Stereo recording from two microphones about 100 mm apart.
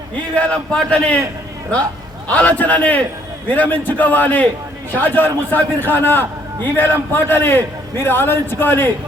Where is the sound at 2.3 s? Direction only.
15° left (ahead or behind).